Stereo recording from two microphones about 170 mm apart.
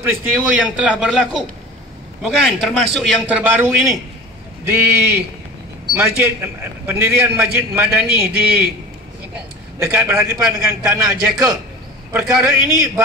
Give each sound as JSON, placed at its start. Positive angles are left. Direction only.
{"t": 0.0, "sound": "a man's voice", "side_deg": -10}
{"t": 9.8, "sound": "a man's voice", "side_deg": -10}